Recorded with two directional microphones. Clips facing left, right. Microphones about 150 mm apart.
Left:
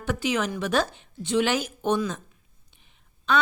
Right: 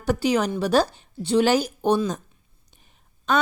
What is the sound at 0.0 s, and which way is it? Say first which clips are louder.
A woman's voice: right 5 dB; 35° right (ahead or behind).